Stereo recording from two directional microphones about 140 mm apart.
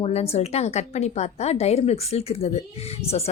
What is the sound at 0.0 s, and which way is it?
A woman's voice, 50° left (ahead or behind).